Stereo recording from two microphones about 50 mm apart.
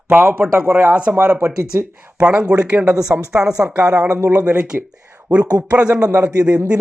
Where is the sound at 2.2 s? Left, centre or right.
Centre.